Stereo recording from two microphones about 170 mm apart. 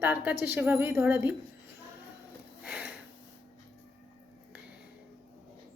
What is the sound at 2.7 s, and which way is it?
Sniff, 5° right (ahead or behind).